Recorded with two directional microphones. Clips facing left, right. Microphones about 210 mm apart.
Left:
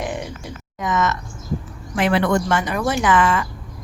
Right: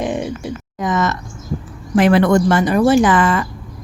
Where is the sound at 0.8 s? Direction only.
35° right (ahead or behind).